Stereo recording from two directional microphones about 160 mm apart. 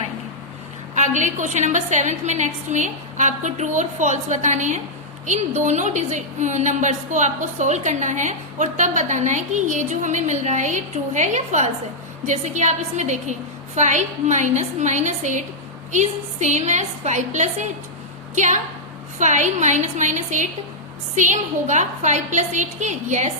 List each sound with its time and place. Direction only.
0.9 s a woman's voice: 50° right (ahead or behind)